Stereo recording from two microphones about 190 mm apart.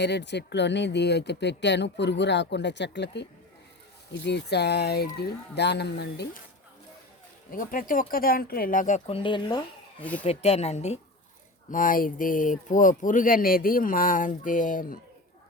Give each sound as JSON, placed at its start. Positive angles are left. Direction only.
{"t": 0.0, "sound": "speech", "side_deg": 65}
{"t": 7.5, "sound": "speech", "side_deg": 45}
{"t": 9.0, "sound": "speech", "side_deg": 30}
{"t": 10.0, "sound": "speech", "side_deg": 10}
{"t": 10.2, "sound": "a woman's voice", "side_deg": 35}
{"t": 11.7, "sound": "speech", "side_deg": 45}